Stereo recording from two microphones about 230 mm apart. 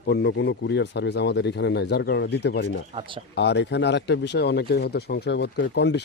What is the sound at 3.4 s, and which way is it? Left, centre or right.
Speech, left.